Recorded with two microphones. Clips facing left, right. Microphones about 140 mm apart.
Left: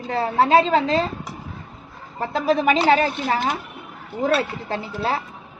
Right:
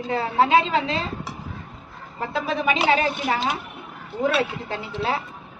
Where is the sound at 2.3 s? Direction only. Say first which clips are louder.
Left 5 dB; 40° left (ahead or behind).